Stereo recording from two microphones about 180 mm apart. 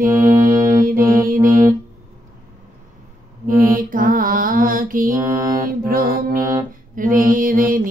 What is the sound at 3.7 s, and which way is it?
Music, 50° right (ahead or behind).